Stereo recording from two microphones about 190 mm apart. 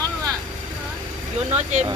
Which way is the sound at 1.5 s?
40° right (ahead or behind).